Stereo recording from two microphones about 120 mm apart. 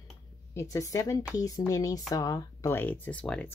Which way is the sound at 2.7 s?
15° left (ahead or behind).